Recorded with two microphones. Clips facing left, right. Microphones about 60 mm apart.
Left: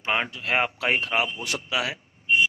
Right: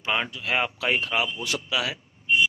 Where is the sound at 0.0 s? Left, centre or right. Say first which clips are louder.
Left 1 dB; left.